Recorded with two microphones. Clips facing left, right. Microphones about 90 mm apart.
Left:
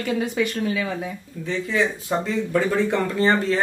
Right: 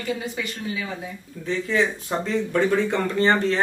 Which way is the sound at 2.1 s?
Centre (ahead or behind).